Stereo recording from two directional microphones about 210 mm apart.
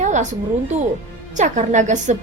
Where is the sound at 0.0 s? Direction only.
35° right (ahead or behind).